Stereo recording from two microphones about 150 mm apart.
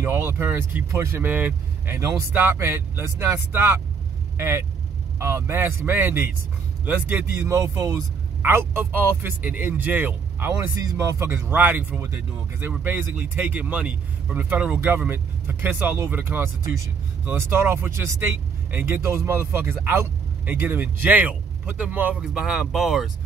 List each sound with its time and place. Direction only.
0.0 s speech: 15° right (ahead or behind)